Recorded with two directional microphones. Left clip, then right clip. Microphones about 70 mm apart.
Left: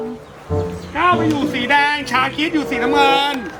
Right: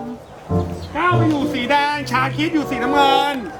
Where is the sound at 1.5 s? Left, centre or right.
Centre.